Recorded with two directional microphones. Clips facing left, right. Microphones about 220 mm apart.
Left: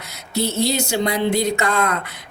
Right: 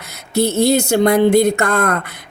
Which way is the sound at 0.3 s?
55° right (ahead or behind).